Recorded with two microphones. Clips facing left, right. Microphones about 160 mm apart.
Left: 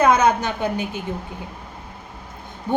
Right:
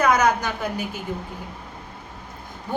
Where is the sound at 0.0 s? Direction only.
25° left (ahead or behind).